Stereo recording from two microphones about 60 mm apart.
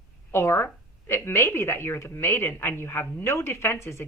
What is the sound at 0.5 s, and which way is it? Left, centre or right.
A woman's voice, left.